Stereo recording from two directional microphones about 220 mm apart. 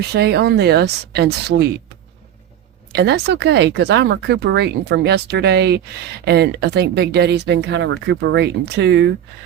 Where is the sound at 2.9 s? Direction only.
50° right (ahead or behind).